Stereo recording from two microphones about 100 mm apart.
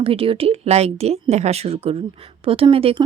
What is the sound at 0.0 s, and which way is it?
A woman's voice, 70° right (ahead or behind).